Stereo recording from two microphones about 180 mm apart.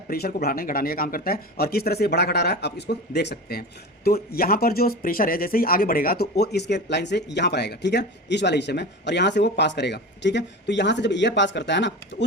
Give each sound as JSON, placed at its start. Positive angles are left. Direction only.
{"t": 0.1, "sound": "speech", "side_deg": 55}